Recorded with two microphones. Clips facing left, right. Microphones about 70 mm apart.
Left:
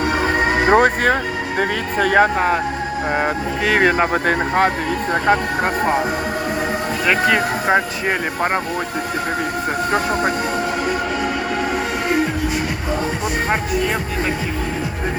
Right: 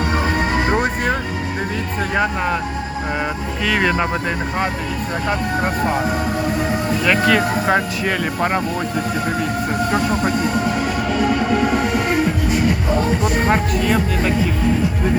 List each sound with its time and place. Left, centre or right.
0.7 s speech: left
1.5 s speech: left
3.1 s speech: left
4.1 s speech: left
5.1 s speech: left
5.6 s speech: left
7.0 s speech: centre
9.9 s speech: left
13.2 s speech: centre